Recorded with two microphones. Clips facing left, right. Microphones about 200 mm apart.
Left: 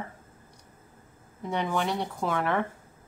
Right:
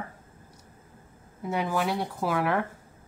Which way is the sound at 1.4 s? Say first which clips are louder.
Right 1 dB; 5° right (ahead or behind).